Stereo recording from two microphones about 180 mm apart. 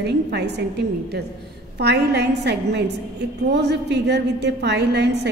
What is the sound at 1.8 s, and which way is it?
A woman's voice, 70° right (ahead or behind).